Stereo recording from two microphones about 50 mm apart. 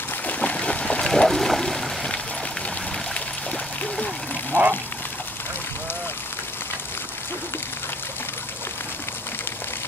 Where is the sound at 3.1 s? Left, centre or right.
Left.